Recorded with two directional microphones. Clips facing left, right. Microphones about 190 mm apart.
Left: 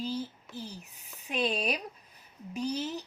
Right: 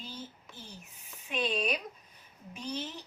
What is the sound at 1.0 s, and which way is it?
Speech, 40° left (ahead or behind).